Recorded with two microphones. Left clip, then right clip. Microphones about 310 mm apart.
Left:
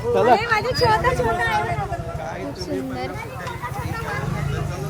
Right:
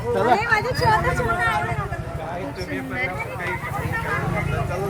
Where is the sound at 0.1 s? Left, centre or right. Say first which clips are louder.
Left 2 dB; centre.